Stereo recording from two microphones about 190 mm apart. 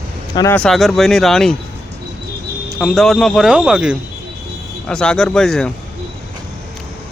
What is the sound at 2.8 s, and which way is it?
Speech, centre (ahead or behind).